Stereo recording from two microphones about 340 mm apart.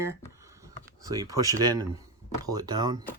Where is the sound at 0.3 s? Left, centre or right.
Centre.